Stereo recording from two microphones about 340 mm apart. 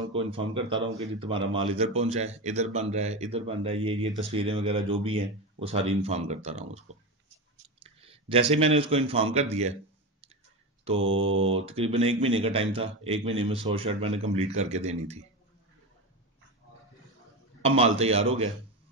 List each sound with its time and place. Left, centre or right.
0.1 s speech: centre
11.0 s mantra: right
11.5 s speech: centre
17.6 s speech: centre